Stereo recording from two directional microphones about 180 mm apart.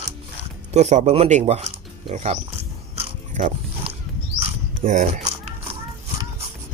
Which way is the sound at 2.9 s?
35° right (ahead or behind).